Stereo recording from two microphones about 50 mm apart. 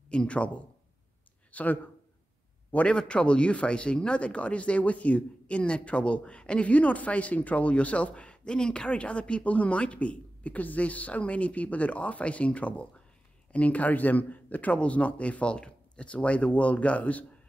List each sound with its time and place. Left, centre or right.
0.1 s speech: left
1.5 s speech: left
2.9 s speech: centre